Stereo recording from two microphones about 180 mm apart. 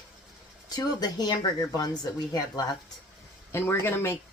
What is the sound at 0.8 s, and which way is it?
Speech, 20° left (ahead or behind).